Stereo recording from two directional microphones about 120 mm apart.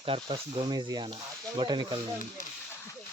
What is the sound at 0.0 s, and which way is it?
Speech, 45° right (ahead or behind).